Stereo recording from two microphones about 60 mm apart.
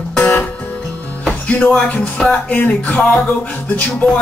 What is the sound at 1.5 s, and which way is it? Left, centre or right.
Music, left.